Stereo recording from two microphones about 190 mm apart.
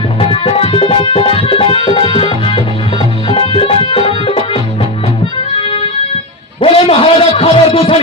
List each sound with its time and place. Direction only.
0.2 s music: 30° left (ahead or behind)
3.8 s tabla: 30° left (ahead or behind)
5.5 s music: 30° left (ahead or behind)
6.6 s a sound: 30° left (ahead or behind)